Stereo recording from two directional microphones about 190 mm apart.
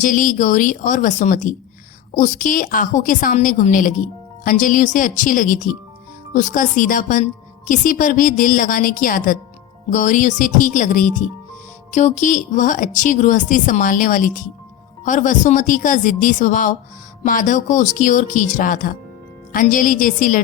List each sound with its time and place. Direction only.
0.0 s a woman's voice: 45° left (ahead or behind)